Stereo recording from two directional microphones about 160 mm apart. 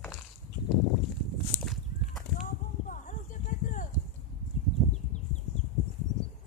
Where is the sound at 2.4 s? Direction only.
50° left (ahead or behind).